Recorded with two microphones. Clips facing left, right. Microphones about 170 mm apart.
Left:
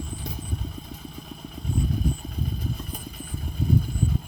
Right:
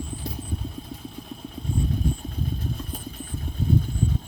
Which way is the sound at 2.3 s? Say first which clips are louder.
Right 1 dB; centre (ahead or behind).